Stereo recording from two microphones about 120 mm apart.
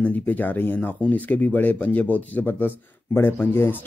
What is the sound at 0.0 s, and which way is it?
Speech, 15° left (ahead or behind).